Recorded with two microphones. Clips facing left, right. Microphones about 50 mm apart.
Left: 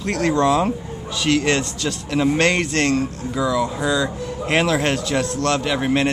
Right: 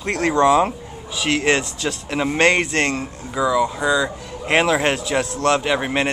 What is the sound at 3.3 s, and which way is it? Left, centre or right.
Speech, centre.